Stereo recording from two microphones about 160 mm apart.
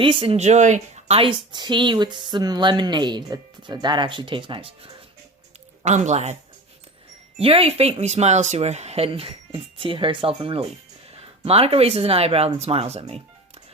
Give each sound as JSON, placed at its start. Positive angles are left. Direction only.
{"t": 0.0, "sound": "speech", "side_deg": -35}
{"t": 5.8, "sound": "speech", "side_deg": -45}
{"t": 7.3, "sound": "speech", "side_deg": -35}